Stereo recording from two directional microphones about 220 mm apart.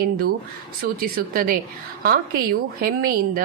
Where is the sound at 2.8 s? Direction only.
40° right (ahead or behind).